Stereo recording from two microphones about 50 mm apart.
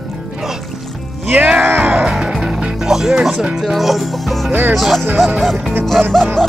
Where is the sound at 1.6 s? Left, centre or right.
Right.